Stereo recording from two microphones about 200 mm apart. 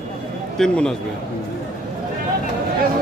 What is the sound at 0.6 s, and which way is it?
Speech, 5° left (ahead or behind).